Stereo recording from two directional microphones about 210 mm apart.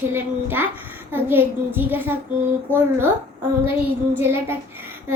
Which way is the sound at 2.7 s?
10° left (ahead or behind).